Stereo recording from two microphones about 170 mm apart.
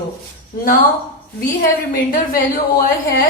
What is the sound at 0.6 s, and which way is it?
A woman's voice, 55° left (ahead or behind).